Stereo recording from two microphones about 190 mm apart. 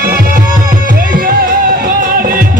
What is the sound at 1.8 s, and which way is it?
Music, 50° right (ahead or behind).